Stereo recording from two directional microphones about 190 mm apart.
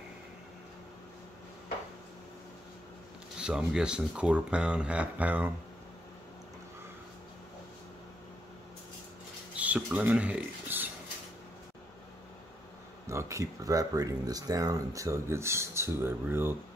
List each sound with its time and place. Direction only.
3.3 s speech: 5° right (ahead or behind)
9.6 s a sound: 5° right (ahead or behind)
13.0 s speech: 15° right (ahead or behind)